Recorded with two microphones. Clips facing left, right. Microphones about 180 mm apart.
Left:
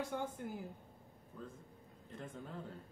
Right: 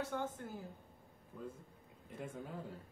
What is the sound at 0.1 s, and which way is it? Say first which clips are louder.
Speech: even; 15° left (ahead or behind).